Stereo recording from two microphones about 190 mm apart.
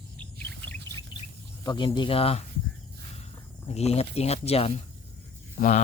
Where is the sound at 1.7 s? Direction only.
25° left (ahead or behind).